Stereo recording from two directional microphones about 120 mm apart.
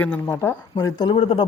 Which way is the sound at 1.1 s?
60° left (ahead or behind).